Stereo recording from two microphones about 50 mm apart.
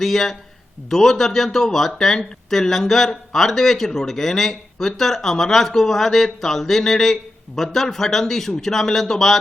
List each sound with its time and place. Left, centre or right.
0.0 s speech: centre